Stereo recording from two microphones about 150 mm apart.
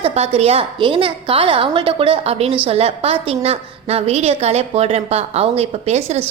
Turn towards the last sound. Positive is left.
turn(degrees=-45)  # may be behind; listen again after turning